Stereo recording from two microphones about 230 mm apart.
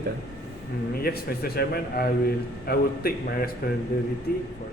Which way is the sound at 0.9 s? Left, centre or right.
Left.